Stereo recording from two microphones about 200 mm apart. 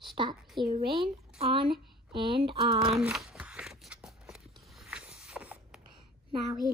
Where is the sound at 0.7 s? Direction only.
30° right (ahead or behind).